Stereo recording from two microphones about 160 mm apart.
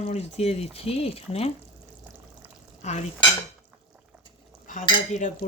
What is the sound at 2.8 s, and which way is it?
Stir, 45° left (ahead or behind).